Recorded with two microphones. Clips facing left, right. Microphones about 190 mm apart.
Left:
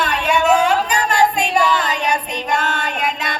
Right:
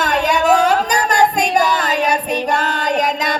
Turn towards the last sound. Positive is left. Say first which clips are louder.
# right 6 dB
turn(degrees=-40)  # may be behind; listen again after turning